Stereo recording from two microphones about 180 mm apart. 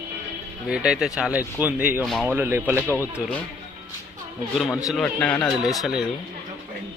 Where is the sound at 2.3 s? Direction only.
10° right (ahead or behind).